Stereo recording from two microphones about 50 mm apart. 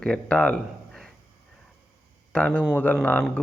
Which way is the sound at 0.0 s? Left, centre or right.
Left.